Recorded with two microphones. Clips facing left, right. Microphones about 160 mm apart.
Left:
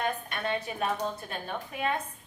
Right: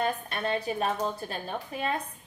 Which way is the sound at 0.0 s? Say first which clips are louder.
Right 2 dB; 35° right (ahead or behind).